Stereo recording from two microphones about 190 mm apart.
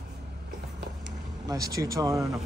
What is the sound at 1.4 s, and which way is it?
Speech, 20° right (ahead or behind).